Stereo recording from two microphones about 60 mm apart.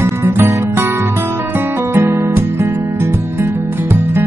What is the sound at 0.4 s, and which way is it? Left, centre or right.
Music, right.